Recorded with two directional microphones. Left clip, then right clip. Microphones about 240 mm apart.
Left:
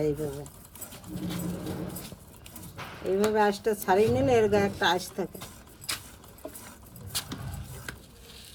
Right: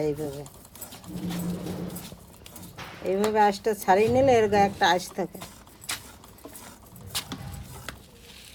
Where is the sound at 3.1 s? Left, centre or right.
Right.